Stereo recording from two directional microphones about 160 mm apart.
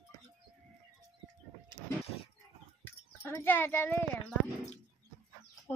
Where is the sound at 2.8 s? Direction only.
15° left (ahead or behind).